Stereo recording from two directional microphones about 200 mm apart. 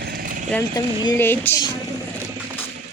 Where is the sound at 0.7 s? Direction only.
20° left (ahead or behind).